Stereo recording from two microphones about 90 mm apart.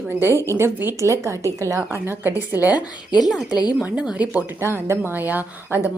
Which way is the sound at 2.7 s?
50° left (ahead or behind).